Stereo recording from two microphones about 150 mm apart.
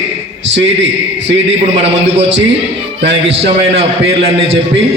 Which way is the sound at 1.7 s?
50° right (ahead or behind).